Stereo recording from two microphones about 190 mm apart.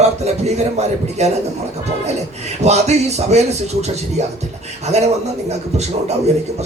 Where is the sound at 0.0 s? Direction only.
35° right (ahead or behind).